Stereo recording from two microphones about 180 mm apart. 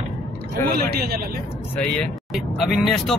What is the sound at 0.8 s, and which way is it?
Speech, 60° right (ahead or behind).